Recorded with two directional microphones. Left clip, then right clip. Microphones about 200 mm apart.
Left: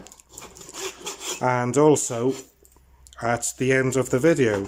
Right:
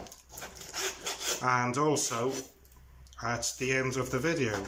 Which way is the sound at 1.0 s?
15° left (ahead or behind).